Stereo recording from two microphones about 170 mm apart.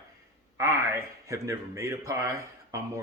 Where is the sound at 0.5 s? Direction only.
15° right (ahead or behind).